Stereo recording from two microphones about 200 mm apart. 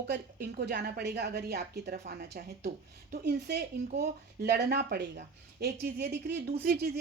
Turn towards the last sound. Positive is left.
turn(degrees=-55)  # may be behind; listen again after turning